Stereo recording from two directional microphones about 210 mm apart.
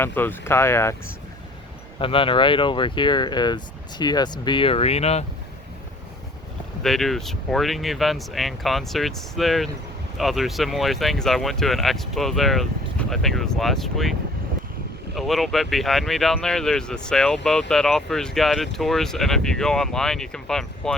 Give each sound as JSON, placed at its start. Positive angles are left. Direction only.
{"t": 0.0, "sound": "speech", "side_deg": 10}
{"t": 2.0, "sound": "speech", "side_deg": 25}
{"t": 6.8, "sound": "speech", "side_deg": 0}